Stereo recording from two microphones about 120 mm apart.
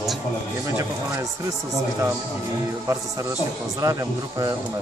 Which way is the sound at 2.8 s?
25° right (ahead or behind).